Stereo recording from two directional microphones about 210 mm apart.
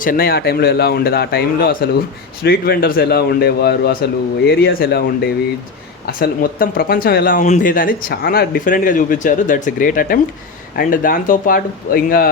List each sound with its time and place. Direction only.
0.0 s speech: 45° left (ahead or behind)